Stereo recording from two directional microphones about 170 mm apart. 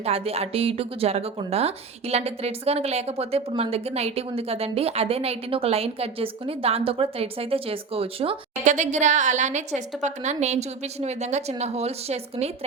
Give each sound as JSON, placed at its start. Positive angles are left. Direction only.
{"t": 0.0, "sound": "a woman's voice", "side_deg": -35}
{"t": 8.6, "sound": "a woman's voice", "side_deg": -45}